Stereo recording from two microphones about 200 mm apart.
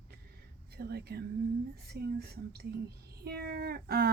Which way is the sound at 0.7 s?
50° right (ahead or behind).